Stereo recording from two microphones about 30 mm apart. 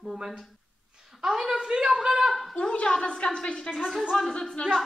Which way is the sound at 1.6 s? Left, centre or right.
Right.